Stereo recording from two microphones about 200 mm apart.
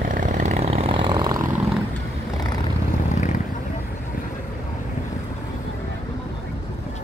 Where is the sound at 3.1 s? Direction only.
35° left (ahead or behind).